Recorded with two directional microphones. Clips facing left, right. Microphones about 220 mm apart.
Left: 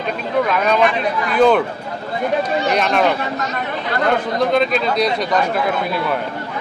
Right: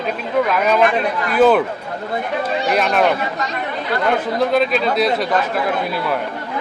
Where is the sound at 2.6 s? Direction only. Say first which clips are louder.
Right 2 dB; 5° right (ahead or behind).